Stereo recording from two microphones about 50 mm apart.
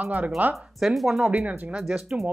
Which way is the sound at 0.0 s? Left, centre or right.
Right.